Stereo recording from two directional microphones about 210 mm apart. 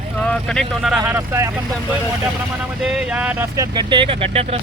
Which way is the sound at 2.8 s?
5° right (ahead or behind).